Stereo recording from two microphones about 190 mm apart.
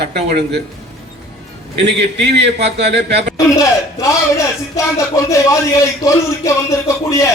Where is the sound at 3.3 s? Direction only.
15° left (ahead or behind).